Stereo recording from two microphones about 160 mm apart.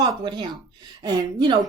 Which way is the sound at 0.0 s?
30° right (ahead or behind).